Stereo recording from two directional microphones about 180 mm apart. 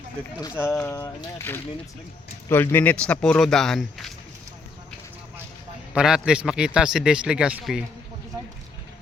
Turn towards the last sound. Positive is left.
turn(degrees=-5)  # may be behind; listen again after turning